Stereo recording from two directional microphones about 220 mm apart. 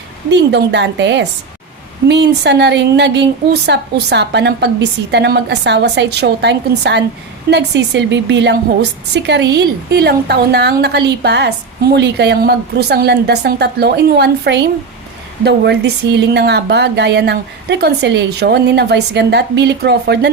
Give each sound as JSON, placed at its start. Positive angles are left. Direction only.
{"t": 0.3, "sound": "a woman's voice", "side_deg": -50}